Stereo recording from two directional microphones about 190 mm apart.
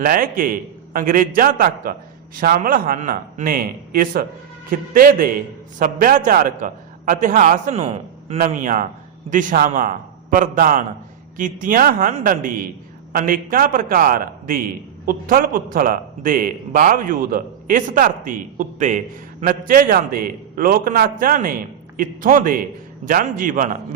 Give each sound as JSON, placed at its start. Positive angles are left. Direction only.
{"t": 0.0, "sound": "a man's voice", "side_deg": -45}